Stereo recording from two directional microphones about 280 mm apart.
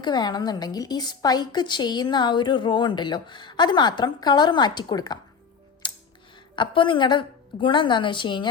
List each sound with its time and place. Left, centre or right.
0.0 s a woman's voice: centre
5.8 s music: centre
6.6 s a woman's voice: centre